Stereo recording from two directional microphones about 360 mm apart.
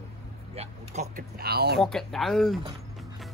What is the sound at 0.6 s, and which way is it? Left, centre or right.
Speech, right.